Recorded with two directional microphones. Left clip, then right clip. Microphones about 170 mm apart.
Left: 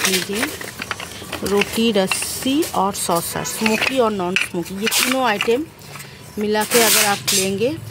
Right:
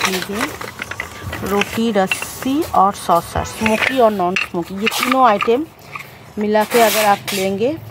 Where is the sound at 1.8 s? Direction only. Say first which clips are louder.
Right 1 dB; 10° right (ahead or behind).